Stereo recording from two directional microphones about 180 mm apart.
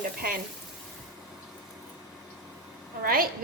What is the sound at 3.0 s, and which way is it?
Speech, 55° right (ahead or behind).